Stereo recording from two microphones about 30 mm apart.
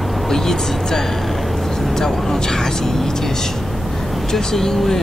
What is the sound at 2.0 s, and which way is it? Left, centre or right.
Speech, centre.